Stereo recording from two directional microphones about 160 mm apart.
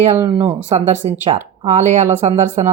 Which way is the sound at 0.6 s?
45° right (ahead or behind).